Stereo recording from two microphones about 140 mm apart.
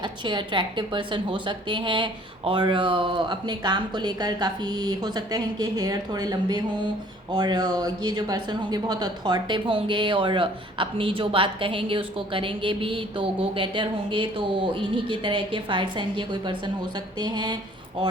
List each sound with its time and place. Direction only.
0.0 s speech: 35° right (ahead or behind)